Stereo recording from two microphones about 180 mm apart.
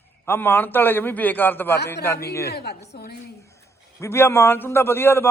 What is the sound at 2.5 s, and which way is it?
Speech, 65° left (ahead or behind).